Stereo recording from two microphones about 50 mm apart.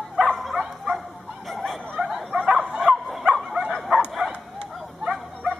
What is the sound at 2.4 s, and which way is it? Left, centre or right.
Bow-wow, right.